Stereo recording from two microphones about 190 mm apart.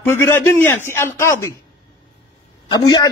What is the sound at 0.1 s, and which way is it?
A man's voice, 10° left (ahead or behind).